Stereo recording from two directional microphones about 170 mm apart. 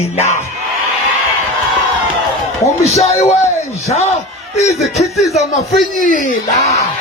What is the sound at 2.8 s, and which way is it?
Speech, 40° left (ahead or behind).